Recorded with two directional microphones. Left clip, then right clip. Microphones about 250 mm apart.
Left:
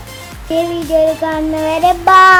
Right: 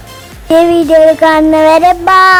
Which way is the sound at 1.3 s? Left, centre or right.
Right.